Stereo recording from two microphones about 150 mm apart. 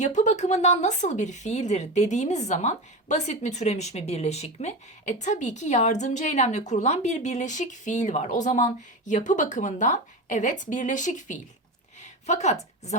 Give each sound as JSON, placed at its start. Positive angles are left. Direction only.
{"t": 0.0, "sound": "a woman's voice", "side_deg": 50}